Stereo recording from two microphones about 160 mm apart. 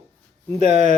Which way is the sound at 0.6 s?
40° right (ahead or behind).